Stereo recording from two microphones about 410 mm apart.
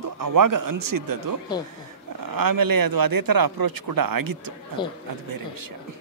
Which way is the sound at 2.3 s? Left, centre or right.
Right.